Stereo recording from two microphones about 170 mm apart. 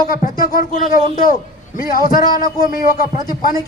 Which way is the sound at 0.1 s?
55° left (ahead or behind).